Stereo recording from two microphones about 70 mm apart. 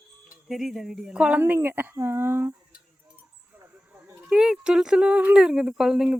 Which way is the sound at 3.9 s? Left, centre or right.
Right.